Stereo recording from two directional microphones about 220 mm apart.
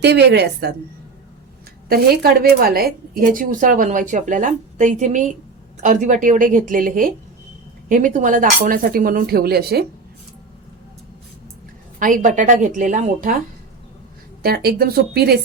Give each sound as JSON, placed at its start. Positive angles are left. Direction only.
{"t": 0.0, "sound": "speech", "side_deg": -50}
{"t": 1.9, "sound": "a woman's voice", "side_deg": -45}
{"t": 11.9, "sound": "a woman's voice", "side_deg": -35}
{"t": 14.4, "sound": "speech", "side_deg": -45}